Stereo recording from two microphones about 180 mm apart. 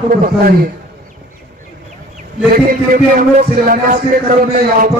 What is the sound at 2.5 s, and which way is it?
A man's voice, 50° right (ahead or behind).